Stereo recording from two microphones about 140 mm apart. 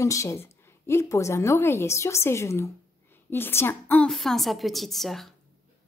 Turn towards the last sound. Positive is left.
turn(degrees=0)  # may be behind; listen again after turning